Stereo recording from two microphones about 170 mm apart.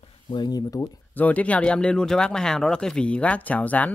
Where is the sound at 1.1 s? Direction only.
10° left (ahead or behind).